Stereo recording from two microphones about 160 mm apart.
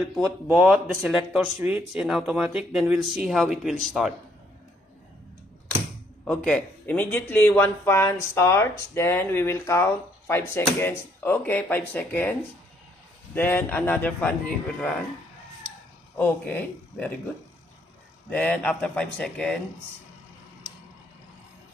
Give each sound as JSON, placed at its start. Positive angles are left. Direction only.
{"t": 0.5, "sound": "speech", "side_deg": -10}
{"t": 6.2, "sound": "speech", "side_deg": 5}
{"t": 16.2, "sound": "speech", "side_deg": 10}
{"t": 18.3, "sound": "speech", "side_deg": 10}